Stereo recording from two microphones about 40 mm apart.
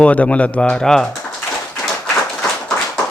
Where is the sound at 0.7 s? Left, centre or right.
Centre.